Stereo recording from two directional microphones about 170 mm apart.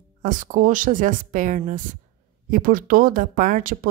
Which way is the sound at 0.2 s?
50° right (ahead or behind).